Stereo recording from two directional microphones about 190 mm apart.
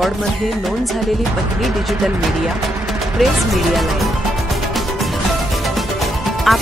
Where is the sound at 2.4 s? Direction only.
Centre (ahead or behind).